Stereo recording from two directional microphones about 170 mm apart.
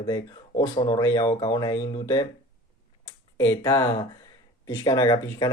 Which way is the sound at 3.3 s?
15° left (ahead or behind).